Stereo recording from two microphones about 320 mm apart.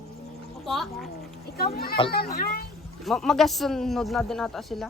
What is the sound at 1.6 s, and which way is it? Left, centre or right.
A child's voice, left.